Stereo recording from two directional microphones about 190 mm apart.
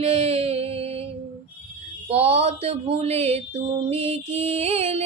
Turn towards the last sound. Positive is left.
turn(degrees=-35)  # may be behind; listen again after turning